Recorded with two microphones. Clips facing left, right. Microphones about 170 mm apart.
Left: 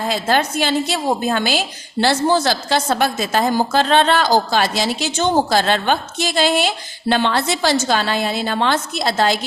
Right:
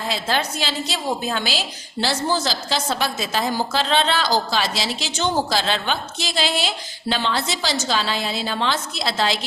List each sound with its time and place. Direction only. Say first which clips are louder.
0.1 s a woman's voice: left 5 dB; 50° left (ahead or behind)